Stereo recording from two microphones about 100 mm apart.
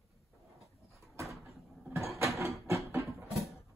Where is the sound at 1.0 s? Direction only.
30° right (ahead or behind).